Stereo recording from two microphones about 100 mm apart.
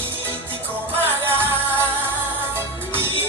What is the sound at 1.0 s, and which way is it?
Music, 20° right (ahead or behind).